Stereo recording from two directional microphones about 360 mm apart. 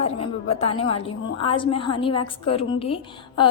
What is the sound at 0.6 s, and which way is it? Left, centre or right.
A woman's voice, centre.